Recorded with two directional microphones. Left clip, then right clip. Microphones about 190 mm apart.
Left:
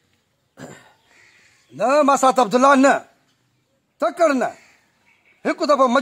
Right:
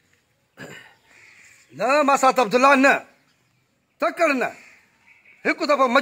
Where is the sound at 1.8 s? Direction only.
60° left (ahead or behind).